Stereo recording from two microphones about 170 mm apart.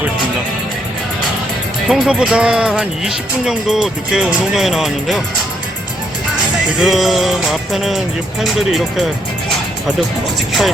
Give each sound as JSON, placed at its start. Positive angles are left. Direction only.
{"t": 1.9, "sound": "speech", "side_deg": -5}
{"t": 6.7, "sound": "speech", "side_deg": 0}